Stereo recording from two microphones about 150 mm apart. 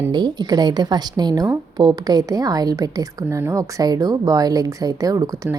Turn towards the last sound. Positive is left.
turn(degrees=-25)  # may be behind; listen again after turning